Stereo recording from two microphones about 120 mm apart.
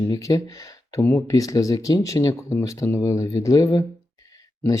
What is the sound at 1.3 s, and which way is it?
Speech, 30° left (ahead or behind).